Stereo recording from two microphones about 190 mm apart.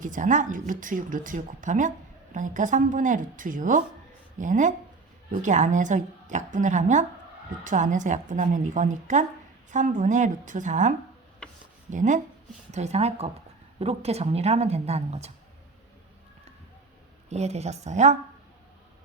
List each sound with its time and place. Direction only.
0.0 s a woman's voice: 40° right (ahead or behind)
17.2 s a woman's voice: 35° right (ahead or behind)